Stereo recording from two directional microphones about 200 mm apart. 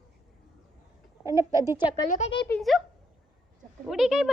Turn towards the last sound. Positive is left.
turn(degrees=0)  # may be behind; listen again after turning